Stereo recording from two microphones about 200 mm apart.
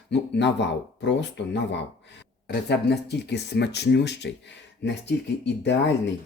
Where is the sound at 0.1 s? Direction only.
60° left (ahead or behind).